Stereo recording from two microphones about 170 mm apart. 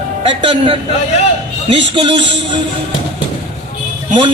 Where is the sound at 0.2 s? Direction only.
30° right (ahead or behind).